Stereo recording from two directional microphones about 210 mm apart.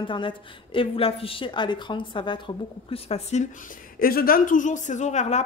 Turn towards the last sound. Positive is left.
turn(degrees=30)  # may be behind; listen again after turning